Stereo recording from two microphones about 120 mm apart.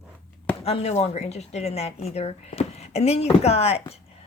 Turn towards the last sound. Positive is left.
turn(degrees=60)  # may be behind; listen again after turning